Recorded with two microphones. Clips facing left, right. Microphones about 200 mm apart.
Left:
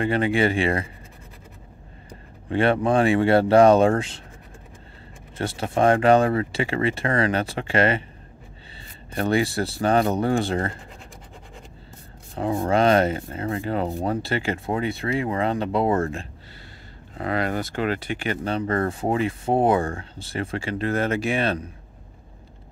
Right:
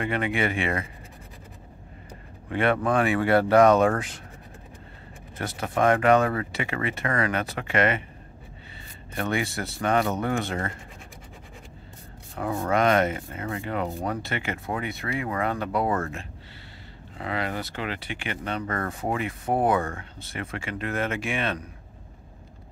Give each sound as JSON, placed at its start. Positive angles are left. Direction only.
{"t": 0.0, "sound": "speech", "side_deg": 30}
{"t": 2.5, "sound": "speech", "side_deg": 30}
{"t": 5.4, "sound": "speech", "side_deg": 30}
{"t": 9.1, "sound": "speech", "side_deg": 35}
{"t": 12.4, "sound": "speech", "side_deg": 30}
{"t": 17.2, "sound": "speech", "side_deg": 45}